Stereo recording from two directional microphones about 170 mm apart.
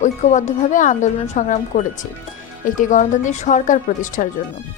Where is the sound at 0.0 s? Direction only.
45° left (ahead or behind).